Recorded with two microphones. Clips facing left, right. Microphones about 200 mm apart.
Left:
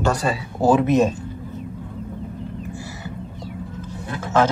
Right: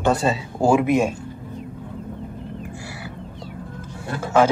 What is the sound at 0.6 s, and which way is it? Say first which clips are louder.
Speech: left 1 dB; 10° right (ahead or behind).